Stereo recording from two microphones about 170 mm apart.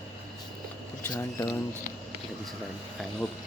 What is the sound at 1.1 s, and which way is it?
Speech, 20° left (ahead or behind).